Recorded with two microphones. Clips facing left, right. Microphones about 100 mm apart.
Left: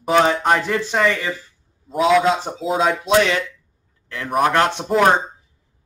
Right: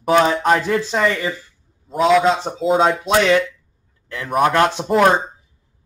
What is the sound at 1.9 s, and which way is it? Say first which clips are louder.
Speech: right 1 dB; centre (ahead or behind).